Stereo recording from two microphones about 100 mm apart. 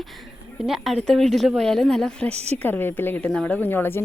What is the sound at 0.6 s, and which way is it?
A woman's voice, 5° right (ahead or behind).